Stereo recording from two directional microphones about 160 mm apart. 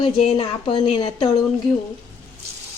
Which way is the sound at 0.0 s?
35° left (ahead or behind).